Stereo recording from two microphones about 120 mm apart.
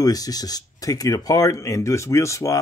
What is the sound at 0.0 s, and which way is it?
Speech, 30° left (ahead or behind).